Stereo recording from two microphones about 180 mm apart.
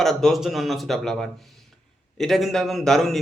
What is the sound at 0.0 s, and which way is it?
A man's voice, centre (ahead or behind).